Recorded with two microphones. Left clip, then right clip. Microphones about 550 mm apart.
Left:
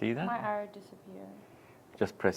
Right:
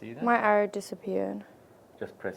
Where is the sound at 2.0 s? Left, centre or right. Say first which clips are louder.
Left 6 dB; left.